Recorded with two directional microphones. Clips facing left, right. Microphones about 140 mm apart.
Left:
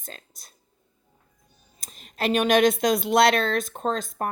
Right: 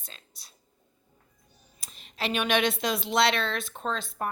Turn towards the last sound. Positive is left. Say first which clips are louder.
# left 5 dB
turn(degrees=45)  # may be behind; listen again after turning